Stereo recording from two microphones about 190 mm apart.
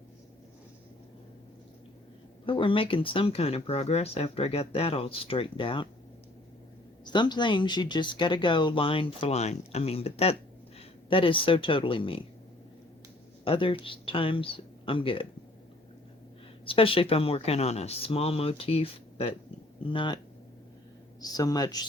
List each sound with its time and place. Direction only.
2.5 s speech: 25° left (ahead or behind)
7.0 s speech: 25° left (ahead or behind)
13.4 s speech: 30° left (ahead or behind)
16.6 s speech: 30° left (ahead or behind)
21.2 s speech: 20° left (ahead or behind)